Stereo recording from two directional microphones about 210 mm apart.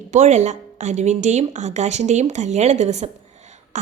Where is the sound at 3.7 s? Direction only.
35° right (ahead or behind).